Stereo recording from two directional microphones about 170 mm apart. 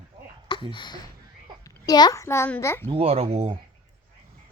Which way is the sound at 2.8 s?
35° right (ahead or behind).